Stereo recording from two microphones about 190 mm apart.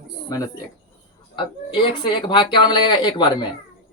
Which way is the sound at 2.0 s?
25° left (ahead or behind).